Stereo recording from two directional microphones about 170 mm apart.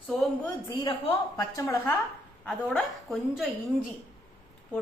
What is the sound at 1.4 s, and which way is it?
A woman's voice, 20° left (ahead or behind).